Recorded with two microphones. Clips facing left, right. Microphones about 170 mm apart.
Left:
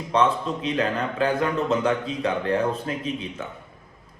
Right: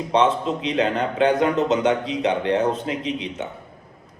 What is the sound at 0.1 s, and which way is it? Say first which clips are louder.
A man's voice: right 2 dB; 25° right (ahead or behind).